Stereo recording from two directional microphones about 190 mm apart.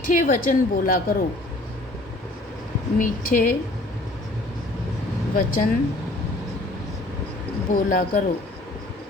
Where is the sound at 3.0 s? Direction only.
45° left (ahead or behind).